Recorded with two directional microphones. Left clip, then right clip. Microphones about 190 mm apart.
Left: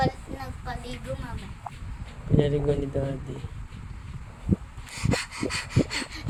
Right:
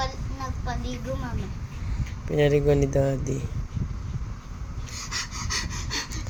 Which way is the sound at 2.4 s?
35° right (ahead or behind).